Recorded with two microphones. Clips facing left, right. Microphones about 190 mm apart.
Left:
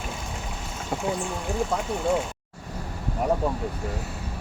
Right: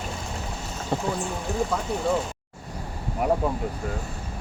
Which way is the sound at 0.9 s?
10° left (ahead or behind).